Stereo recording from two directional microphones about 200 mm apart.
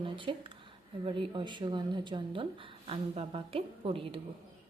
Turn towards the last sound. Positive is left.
turn(degrees=-25)  # may be behind; listen again after turning